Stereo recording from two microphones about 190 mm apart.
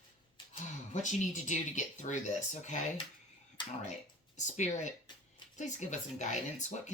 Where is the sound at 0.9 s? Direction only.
40° left (ahead or behind).